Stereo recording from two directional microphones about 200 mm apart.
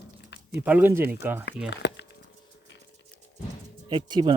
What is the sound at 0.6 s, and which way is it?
Speech, 10° right (ahead or behind).